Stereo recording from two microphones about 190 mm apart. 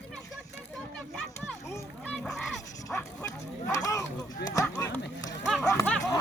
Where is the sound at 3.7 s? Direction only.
15° left (ahead or behind).